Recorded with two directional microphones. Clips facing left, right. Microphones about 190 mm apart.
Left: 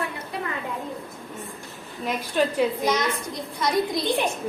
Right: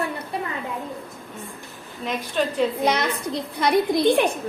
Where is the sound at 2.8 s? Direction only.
65° right (ahead or behind).